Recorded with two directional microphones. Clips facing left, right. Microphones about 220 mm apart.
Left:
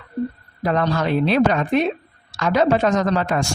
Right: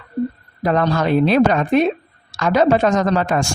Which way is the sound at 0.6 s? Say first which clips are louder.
Right 3 dB; 45° right (ahead or behind).